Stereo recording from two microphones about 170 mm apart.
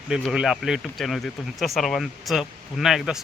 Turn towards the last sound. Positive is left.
turn(degrees=0)  # may be behind; listen again after turning